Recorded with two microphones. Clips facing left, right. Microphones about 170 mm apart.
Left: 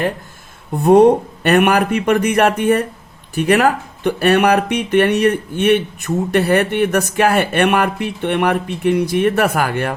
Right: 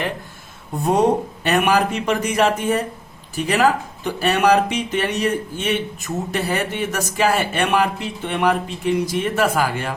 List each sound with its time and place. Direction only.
0.8 s speech: 55° left (ahead or behind)